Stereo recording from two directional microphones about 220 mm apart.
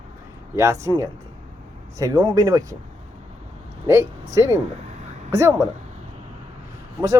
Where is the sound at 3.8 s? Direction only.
10° right (ahead or behind).